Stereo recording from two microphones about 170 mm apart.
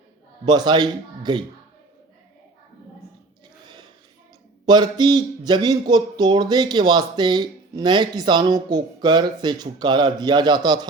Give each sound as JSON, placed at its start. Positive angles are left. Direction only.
{"t": 0.4, "sound": "a man's voice", "side_deg": -25}
{"t": 4.6, "sound": "a man's voice", "side_deg": -25}